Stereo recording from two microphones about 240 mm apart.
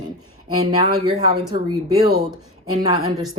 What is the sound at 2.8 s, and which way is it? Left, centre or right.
Speech, centre.